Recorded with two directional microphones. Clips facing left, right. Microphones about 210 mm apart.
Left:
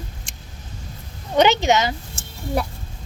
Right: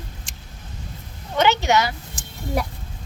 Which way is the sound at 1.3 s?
20° left (ahead or behind).